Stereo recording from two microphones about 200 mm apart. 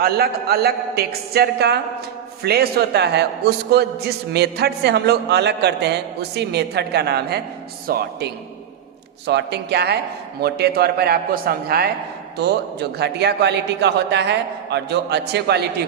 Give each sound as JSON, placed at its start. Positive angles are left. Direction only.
{"t": 0.0, "sound": "a woman's voice", "side_deg": -50}